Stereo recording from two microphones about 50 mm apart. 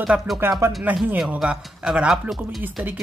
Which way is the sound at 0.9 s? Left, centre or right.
Right.